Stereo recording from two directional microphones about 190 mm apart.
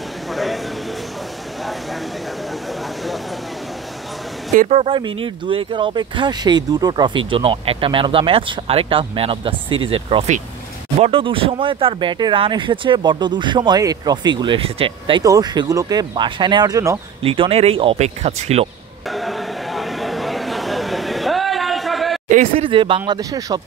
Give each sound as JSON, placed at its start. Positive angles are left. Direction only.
{"t": 0.3, "sound": "a sound", "side_deg": 0}
{"t": 4.6, "sound": "speech", "side_deg": -35}
{"t": 17.2, "sound": "speech", "side_deg": -30}
{"t": 19.1, "sound": "a sound", "side_deg": 0}
{"t": 22.3, "sound": "speech", "side_deg": -40}
{"t": 22.7, "sound": "speech", "side_deg": -25}